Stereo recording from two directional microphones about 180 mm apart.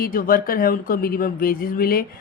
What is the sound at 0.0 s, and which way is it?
Speech, 50° left (ahead or behind).